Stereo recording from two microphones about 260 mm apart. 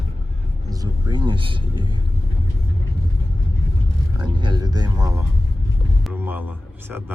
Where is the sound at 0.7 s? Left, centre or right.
Centre.